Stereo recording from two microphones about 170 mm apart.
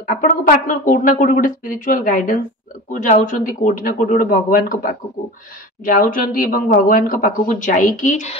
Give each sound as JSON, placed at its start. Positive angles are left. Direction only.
{"t": 0.0, "sound": "speech", "side_deg": 55}